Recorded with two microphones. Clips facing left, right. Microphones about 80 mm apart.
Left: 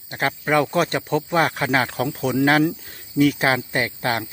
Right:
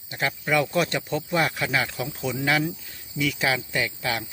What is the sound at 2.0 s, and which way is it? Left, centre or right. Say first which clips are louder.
Speech: left 7 dB; left.